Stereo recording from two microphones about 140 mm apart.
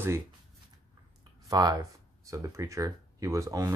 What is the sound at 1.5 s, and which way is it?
Speech, 25° right (ahead or behind).